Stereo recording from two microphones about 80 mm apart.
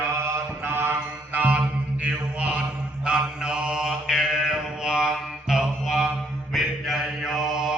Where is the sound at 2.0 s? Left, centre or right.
Centre.